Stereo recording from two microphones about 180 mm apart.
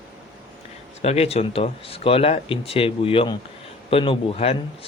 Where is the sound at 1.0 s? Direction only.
35° left (ahead or behind).